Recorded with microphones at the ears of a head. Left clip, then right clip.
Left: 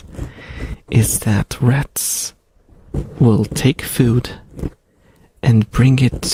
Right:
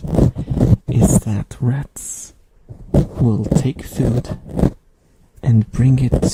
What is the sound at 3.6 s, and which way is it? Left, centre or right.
Speech, left.